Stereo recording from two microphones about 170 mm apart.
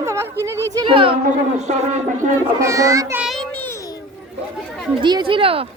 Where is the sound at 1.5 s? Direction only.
45° right (ahead or behind).